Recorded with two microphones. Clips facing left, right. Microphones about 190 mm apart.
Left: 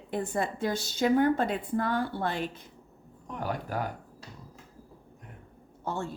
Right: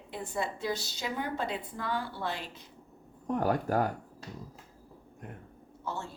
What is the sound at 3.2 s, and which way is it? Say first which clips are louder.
Speech: right 6 dB; 45° right (ahead or behind).